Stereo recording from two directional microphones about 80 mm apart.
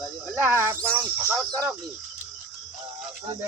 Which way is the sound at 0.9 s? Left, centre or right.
Right.